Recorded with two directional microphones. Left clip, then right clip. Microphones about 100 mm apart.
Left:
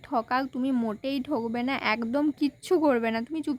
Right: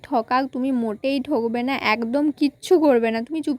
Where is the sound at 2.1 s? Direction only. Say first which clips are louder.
Right 5 dB; 40° right (ahead or behind).